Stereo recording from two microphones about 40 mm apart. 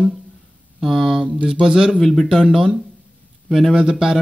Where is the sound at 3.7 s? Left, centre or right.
Centre.